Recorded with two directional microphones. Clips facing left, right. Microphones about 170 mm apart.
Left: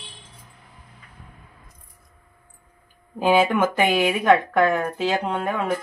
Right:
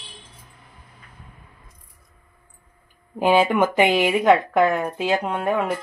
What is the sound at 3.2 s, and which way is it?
A woman's voice, 15° right (ahead or behind).